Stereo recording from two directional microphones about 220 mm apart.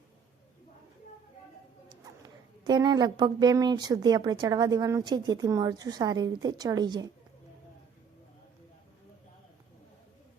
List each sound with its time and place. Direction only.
2.2 s a woman's voice: 20° right (ahead or behind)